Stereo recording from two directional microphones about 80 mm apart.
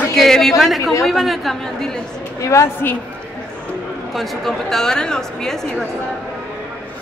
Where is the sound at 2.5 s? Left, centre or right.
Left.